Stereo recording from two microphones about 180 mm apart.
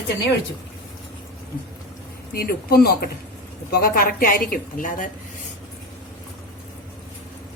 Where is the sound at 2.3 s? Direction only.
55° left (ahead or behind).